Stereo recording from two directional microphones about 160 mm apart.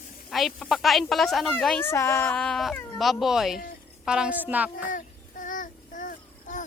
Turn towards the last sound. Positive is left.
turn(degrees=55)  # may be behind; listen again after turning